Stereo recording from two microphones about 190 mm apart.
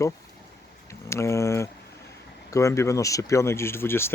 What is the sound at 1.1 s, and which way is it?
Speech, 15° left (ahead or behind).